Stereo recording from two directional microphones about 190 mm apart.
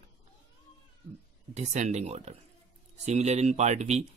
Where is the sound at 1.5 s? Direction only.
35° right (ahead or behind).